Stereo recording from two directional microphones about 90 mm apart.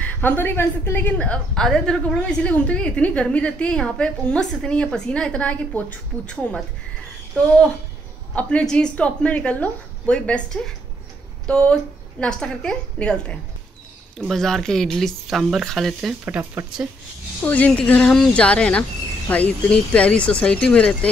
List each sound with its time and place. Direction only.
0.0 s a woman's voice: 20° left (ahead or behind)
1.1 s a woman's voice: 10° left (ahead or behind)
16.4 s speech: 15° right (ahead or behind)
17.4 s a woman's voice: 15° left (ahead or behind)